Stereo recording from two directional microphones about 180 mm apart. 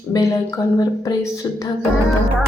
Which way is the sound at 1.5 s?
20° left (ahead or behind).